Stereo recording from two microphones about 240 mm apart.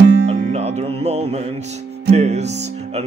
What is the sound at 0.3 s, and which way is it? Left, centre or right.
Music, right.